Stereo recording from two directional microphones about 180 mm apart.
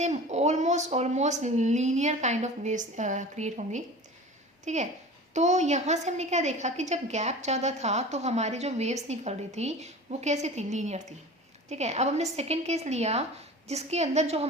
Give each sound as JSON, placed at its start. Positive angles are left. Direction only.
{"t": 0.0, "sound": "a woman's voice", "side_deg": -40}